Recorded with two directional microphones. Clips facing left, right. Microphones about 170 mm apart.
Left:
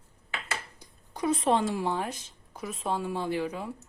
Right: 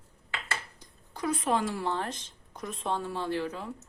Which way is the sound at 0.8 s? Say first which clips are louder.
Left 3 dB; 20° left (ahead or behind).